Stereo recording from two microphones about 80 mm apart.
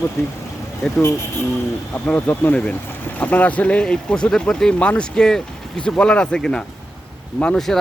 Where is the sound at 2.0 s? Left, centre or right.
Left.